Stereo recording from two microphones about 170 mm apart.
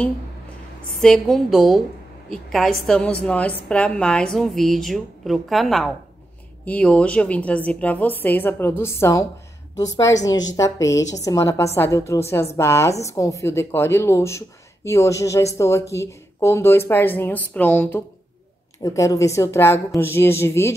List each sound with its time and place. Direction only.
1.0 s a woman's voice: centre (ahead or behind)